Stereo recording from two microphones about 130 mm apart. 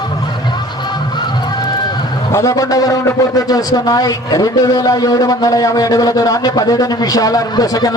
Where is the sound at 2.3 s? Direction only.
25° left (ahead or behind).